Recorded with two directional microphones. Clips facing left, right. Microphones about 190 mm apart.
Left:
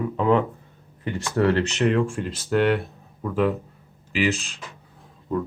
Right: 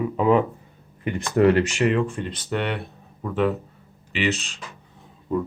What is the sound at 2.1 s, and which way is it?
Speech, centre (ahead or behind).